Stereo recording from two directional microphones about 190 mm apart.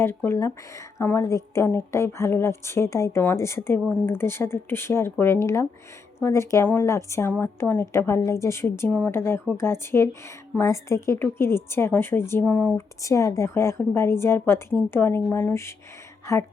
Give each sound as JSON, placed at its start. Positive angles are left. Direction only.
{"t": 0.0, "sound": "a woman's voice", "side_deg": 15}